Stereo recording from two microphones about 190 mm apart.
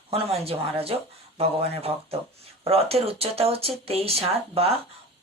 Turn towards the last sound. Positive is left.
turn(degrees=-30)  # may be behind; listen again after turning